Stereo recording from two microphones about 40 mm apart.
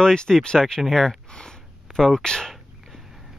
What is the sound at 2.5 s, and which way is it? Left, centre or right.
Dog, centre.